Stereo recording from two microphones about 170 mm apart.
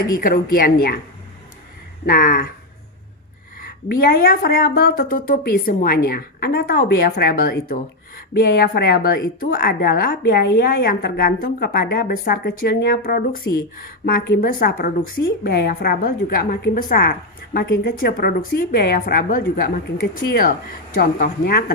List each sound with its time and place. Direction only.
0.2 s a woman's voice: 60° left (ahead or behind)
2.0 s a woman's voice: 55° left (ahead or behind)
3.8 s a woman's voice: 65° left (ahead or behind)